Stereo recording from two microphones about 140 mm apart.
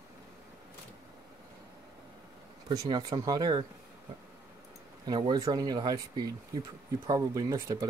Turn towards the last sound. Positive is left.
turn(degrees=-25)  # may be behind; listen again after turning